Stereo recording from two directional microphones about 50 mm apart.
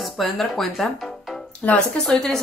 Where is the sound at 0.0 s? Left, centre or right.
Centre.